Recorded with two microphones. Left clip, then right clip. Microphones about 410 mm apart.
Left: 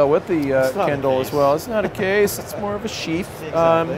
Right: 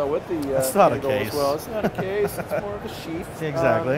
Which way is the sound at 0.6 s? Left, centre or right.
Right.